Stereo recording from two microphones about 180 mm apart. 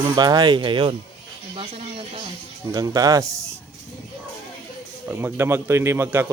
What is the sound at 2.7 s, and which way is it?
Speech, 20° right (ahead or behind).